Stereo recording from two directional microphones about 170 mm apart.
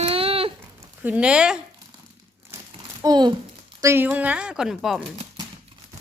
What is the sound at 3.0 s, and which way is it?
Speech, 25° right (ahead or behind).